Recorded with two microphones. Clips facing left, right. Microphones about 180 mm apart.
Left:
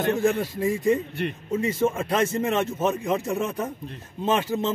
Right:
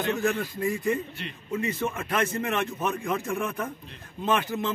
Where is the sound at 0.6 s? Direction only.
20° left (ahead or behind).